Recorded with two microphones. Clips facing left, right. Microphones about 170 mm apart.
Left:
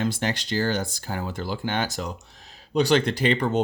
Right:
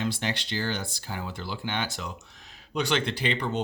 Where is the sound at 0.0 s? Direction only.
45° left (ahead or behind).